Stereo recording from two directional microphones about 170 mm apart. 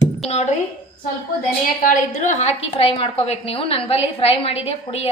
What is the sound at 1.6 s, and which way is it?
A woman's voice, 50° left (ahead or behind).